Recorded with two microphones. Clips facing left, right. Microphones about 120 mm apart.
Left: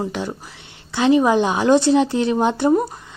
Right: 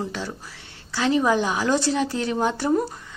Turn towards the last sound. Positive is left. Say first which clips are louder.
# left 5 dB
turn(degrees=20)  # may be behind; listen again after turning